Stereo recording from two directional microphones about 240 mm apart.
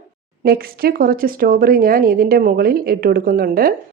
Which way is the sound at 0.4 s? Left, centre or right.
Right.